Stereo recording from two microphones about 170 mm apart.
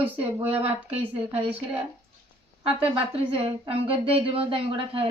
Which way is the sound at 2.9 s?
35° right (ahead or behind).